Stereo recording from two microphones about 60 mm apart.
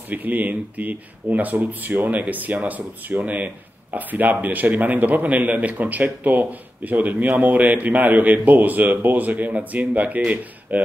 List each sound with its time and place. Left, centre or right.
0.1 s speech: right